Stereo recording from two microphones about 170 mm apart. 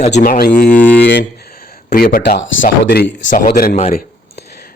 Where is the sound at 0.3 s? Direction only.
60° left (ahead or behind).